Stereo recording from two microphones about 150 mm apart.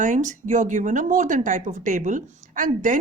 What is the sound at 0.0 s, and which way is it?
Speech, 55° right (ahead or behind).